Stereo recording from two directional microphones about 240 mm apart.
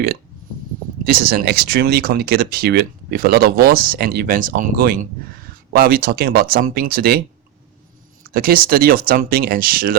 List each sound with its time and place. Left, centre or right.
1.0 s speech: right
8.3 s speech: right